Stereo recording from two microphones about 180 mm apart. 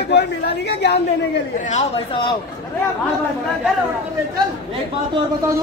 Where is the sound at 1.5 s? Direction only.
40° left (ahead or behind).